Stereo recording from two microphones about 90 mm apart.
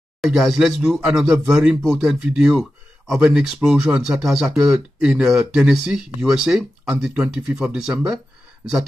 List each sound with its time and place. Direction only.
0.2 s speech: 5° right (ahead or behind)